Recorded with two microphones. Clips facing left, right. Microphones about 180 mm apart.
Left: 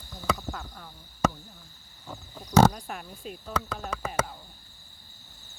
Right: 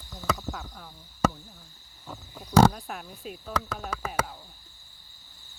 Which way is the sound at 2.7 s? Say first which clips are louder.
Even; centre (ahead or behind).